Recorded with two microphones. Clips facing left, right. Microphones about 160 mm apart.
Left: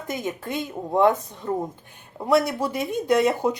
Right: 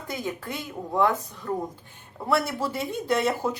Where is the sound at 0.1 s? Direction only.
20° left (ahead or behind).